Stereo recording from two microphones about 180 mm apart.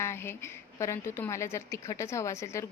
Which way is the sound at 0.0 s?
15° left (ahead or behind).